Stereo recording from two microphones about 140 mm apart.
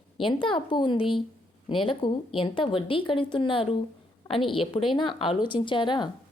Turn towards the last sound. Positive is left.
turn(degrees=35)  # may be behind; listen again after turning